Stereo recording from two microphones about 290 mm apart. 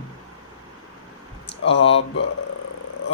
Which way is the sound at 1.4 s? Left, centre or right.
Left.